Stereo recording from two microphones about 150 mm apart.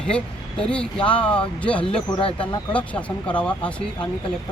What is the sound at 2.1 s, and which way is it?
Speech, 35° left (ahead or behind).